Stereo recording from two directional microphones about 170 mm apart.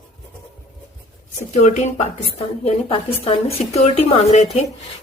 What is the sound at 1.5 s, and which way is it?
Speech, 40° left (ahead or behind).